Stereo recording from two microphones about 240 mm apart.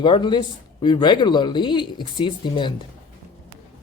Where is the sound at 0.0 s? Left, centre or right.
Centre.